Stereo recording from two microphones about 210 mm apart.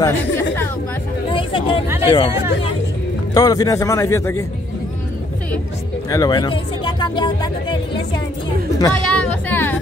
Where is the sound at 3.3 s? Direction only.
15° left (ahead or behind).